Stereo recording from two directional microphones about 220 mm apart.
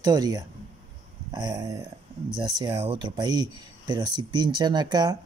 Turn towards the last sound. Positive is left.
turn(degrees=-20)  # may be behind; listen again after turning